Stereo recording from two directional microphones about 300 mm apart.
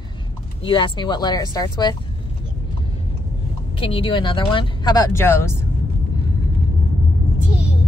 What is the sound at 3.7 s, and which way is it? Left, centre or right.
Speech, centre.